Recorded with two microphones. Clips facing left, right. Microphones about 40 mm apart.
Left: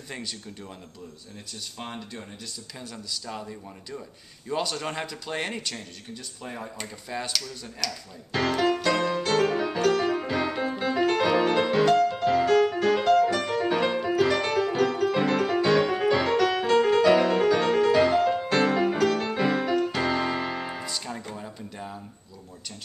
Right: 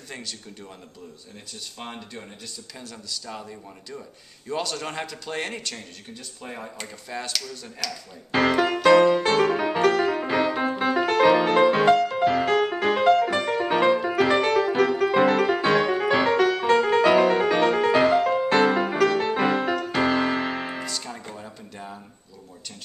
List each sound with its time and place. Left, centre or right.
0.1 s speech: centre
1.8 s speech: centre
8.3 s music: right
9.4 s music: right
18.2 s music: centre
20.8 s music: centre